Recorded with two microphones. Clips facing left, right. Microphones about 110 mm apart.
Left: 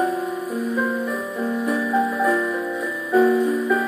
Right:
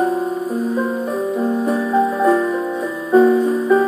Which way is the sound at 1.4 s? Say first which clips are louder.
Right 3 dB; 35° right (ahead or behind).